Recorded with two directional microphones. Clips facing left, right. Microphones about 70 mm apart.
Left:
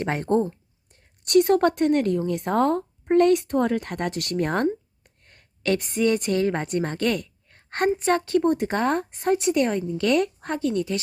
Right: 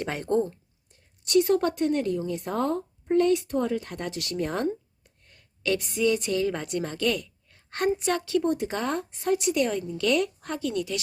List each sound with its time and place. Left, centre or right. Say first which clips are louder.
0.0 s speech: left 3 dB; left
1.2 s a woman's voice: left 4 dB; left